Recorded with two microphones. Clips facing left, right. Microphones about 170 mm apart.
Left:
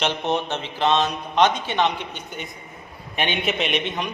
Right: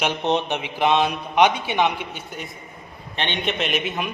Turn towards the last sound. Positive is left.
turn(degrees=-5)  # may be behind; listen again after turning